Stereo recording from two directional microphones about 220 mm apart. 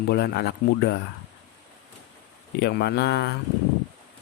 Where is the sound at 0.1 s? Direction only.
45° left (ahead or behind).